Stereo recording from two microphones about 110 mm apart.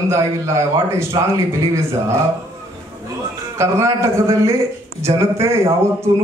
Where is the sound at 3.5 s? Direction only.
25° right (ahead or behind).